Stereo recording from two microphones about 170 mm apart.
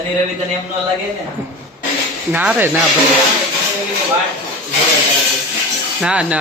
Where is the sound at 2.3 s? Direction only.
10° right (ahead or behind).